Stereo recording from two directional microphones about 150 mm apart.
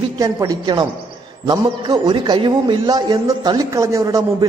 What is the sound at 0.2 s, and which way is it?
A man's voice, 25° right (ahead or behind).